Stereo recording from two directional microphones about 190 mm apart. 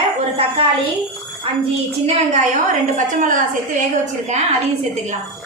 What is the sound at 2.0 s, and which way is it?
A woman's voice, 40° right (ahead or behind).